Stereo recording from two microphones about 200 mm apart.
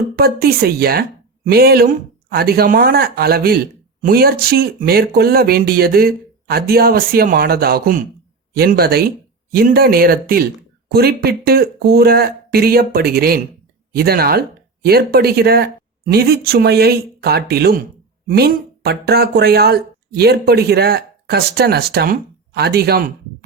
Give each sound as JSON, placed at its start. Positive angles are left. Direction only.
{"t": 0.2, "sound": "speech", "side_deg": -50}